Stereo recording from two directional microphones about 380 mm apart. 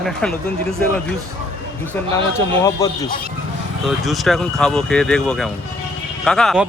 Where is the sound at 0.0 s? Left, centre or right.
Centre.